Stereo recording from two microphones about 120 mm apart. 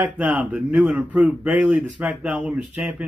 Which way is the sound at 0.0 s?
15° right (ahead or behind).